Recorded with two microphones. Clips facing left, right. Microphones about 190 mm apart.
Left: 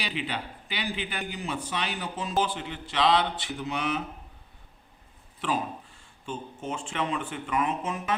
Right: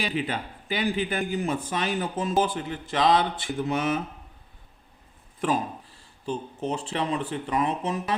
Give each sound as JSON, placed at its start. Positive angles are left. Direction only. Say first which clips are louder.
{"t": 0.0, "sound": "speech", "louder": "right 4 dB", "side_deg": -45}
{"t": 5.4, "sound": "speech", "louder": "right 4 dB", "side_deg": -40}